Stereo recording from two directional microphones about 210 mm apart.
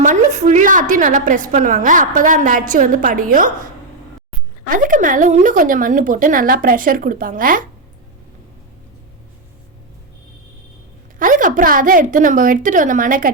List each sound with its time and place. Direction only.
0.0 s a woman's voice: 35° right (ahead or behind)
4.7 s a woman's voice: 40° right (ahead or behind)
11.2 s a woman's voice: 40° right (ahead or behind)